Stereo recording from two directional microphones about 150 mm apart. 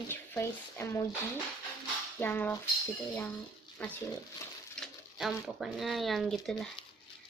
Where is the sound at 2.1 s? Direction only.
10° left (ahead or behind).